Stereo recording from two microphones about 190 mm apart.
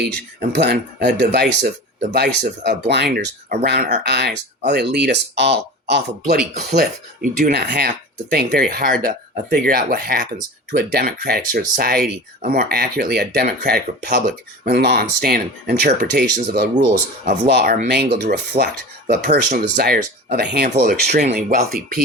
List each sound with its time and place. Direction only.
0.5 s speech: 60° right (ahead or behind)
21.2 s speech: 40° right (ahead or behind)